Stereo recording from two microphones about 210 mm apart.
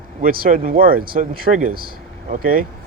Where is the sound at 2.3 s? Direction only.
40° right (ahead or behind).